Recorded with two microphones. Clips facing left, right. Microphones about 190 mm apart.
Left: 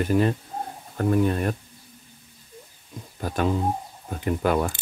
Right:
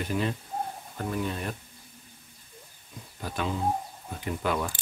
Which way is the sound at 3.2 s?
45° left (ahead or behind).